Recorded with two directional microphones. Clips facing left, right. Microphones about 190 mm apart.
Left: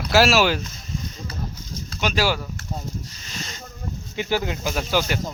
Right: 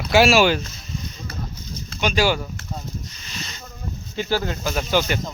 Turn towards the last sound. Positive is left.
turn(degrees=5)  # may be behind; listen again after turning